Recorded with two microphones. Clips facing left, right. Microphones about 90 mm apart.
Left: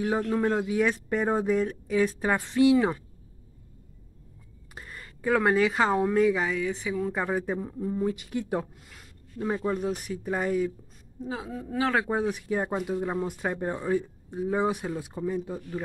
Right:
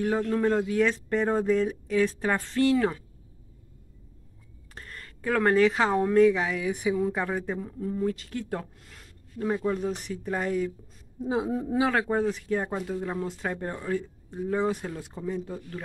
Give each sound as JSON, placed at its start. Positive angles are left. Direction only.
{"t": 0.3, "sound": "speech", "side_deg": 10}
{"t": 4.7, "sound": "speech", "side_deg": 10}
{"t": 6.7, "sound": "speech", "side_deg": -15}
{"t": 7.1, "sound": "speech", "side_deg": 5}
{"t": 8.9, "sound": "speech", "side_deg": 5}
{"t": 11.1, "sound": "a woman's voice", "side_deg": -20}
{"t": 11.9, "sound": "speech", "side_deg": 5}